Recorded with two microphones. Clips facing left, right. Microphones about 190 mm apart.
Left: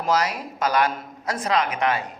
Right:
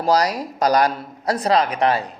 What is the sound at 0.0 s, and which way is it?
A woman's voice, 35° right (ahead or behind).